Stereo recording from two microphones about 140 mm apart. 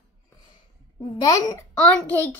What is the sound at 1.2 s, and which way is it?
Speech, 25° left (ahead or behind).